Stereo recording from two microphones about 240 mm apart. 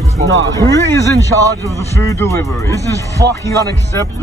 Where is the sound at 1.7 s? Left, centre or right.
Centre.